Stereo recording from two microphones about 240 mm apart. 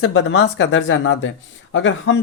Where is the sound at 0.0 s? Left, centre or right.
Left.